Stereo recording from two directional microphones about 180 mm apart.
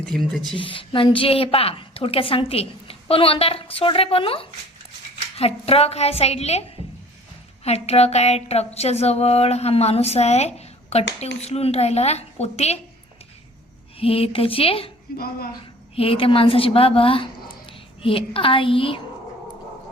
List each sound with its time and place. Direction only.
0.0 s speech: 5° left (ahead or behind)
0.5 s a woman's voice: 30° left (ahead or behind)
14.0 s a woman's voice: 30° left (ahead or behind)
16.0 s a woman's voice: 30° left (ahead or behind)